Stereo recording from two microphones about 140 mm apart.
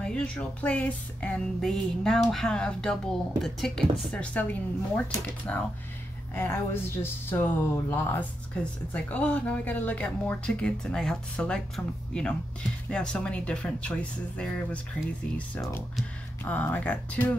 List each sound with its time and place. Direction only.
0.0 s speech: 5° left (ahead or behind)
6.3 s speech: 15° left (ahead or behind)
16.4 s speech: 10° left (ahead or behind)